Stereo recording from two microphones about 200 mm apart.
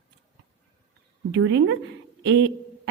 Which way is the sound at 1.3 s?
65° right (ahead or behind).